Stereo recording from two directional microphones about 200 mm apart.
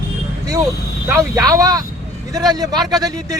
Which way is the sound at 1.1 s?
15° right (ahead or behind).